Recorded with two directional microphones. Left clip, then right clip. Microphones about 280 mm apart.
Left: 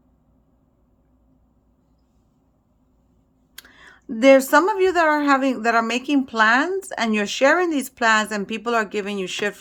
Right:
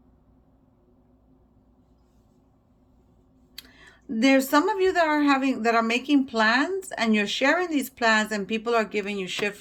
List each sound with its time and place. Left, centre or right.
3.5 s speech: centre